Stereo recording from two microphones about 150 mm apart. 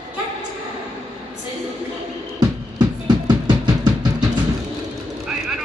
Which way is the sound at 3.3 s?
25° right (ahead or behind).